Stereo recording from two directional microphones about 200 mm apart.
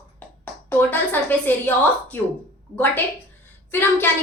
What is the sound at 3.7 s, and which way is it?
Speech, 10° left (ahead or behind).